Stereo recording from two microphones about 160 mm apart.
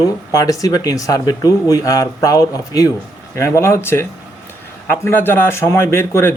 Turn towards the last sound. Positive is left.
turn(degrees=15)  # may be behind; listen again after turning